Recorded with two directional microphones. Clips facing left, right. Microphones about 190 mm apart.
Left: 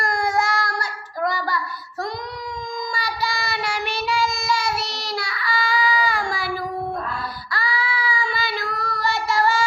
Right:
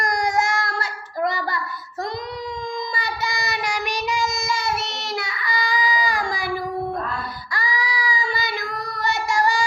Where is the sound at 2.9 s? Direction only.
20° right (ahead or behind).